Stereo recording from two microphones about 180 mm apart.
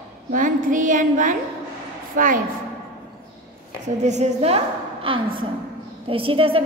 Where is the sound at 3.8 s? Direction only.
40° right (ahead or behind).